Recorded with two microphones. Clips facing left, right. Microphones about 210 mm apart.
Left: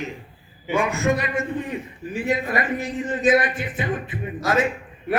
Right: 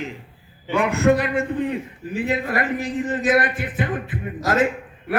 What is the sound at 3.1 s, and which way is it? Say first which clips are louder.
Music: left 2 dB; 55° right (ahead or behind).